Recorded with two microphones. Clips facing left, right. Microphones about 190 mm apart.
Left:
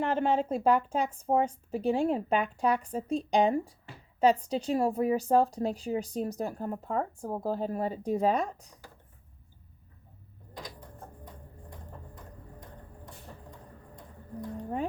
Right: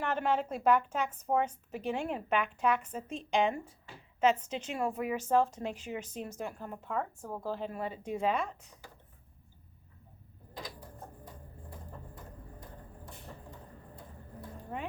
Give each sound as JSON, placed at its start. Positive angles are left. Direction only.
{"t": 0.0, "sound": "a woman's voice", "side_deg": 30}